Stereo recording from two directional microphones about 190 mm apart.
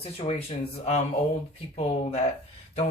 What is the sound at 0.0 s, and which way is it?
Speech, 30° left (ahead or behind).